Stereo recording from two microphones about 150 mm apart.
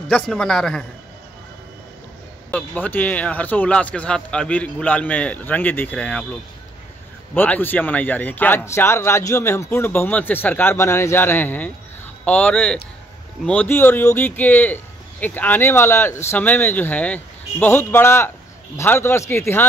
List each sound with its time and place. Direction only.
0.1 s a man's voice: 5° left (ahead or behind)
2.5 s speech: 10° left (ahead or behind)
7.3 s speech: 10° left (ahead or behind)